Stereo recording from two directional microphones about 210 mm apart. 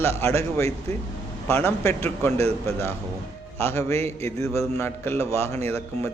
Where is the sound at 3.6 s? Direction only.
10° left (ahead or behind).